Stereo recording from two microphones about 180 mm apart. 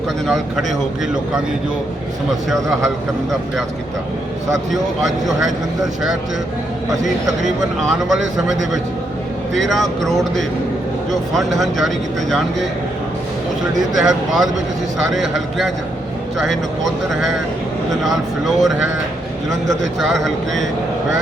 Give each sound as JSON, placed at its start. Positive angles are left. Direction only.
{"t": 0.3, "sound": "a man's voice", "side_deg": 0}
{"t": 7.4, "sound": "a man's voice", "side_deg": 0}
{"t": 14.0, "sound": "a man's voice", "side_deg": 0}
{"t": 18.0, "sound": "a man's voice", "side_deg": 0}
{"t": 20.0, "sound": "a man's voice", "side_deg": 0}